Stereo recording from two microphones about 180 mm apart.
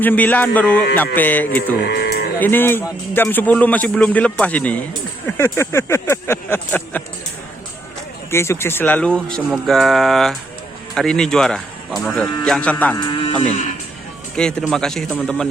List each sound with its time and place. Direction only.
0.0 s a man's voice: 10° left (ahead or behind)
1.9 s cattle: 60° left (ahead or behind)
2.4 s a man's voice: 10° left (ahead or behind)
8.3 s a man's voice: 15° left (ahead or behind)
13.0 s sheep: 30° left (ahead or behind)
13.4 s speech: 35° left (ahead or behind)
14.3 s speech: 5° left (ahead or behind)